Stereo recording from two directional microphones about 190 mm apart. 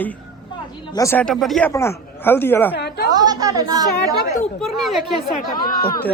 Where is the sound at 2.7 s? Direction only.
60° left (ahead or behind).